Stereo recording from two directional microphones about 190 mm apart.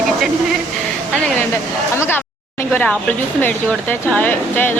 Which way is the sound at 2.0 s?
10° left (ahead or behind).